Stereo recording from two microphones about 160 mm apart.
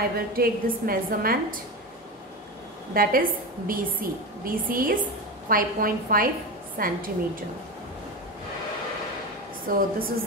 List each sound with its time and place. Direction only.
0.3 s a woman's voice: 65° right (ahead or behind)
2.9 s a woman's voice: 65° right (ahead or behind)
9.7 s a woman's voice: 65° right (ahead or behind)